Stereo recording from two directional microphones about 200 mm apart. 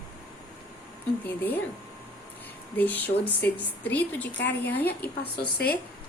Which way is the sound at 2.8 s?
10° left (ahead or behind).